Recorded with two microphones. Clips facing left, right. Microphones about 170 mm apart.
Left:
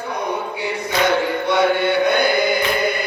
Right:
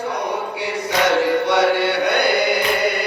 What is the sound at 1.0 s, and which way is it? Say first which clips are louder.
Chant: right 3 dB; 80° right.